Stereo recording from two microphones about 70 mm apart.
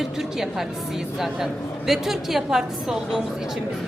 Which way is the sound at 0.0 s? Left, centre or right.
Centre.